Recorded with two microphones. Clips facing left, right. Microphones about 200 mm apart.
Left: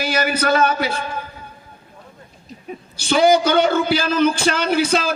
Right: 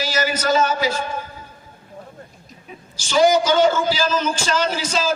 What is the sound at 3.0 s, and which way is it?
A man's voice, 60° left (ahead or behind).